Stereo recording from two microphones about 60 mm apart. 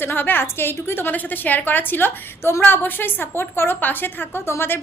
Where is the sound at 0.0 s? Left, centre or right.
Left.